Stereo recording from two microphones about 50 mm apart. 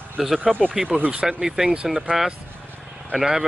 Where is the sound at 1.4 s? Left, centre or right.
Centre.